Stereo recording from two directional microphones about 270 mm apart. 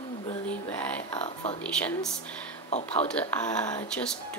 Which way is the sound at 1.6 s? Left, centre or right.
Centre.